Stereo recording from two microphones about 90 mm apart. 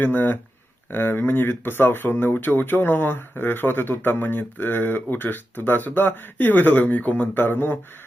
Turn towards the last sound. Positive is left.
turn(degrees=25)  # may be behind; listen again after turning